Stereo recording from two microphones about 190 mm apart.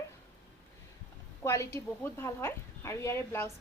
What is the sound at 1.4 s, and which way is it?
A woman's voice, 15° left (ahead or behind).